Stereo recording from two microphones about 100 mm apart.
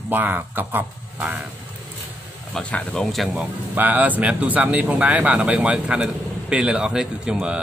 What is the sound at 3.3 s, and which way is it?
Speech, 15° right (ahead or behind).